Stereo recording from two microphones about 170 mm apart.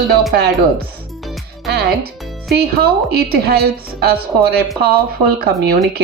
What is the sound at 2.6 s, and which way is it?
Speech, 65° right (ahead or behind).